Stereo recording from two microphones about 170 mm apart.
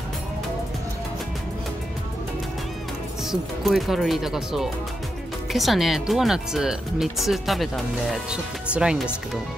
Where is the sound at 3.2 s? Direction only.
Centre (ahead or behind).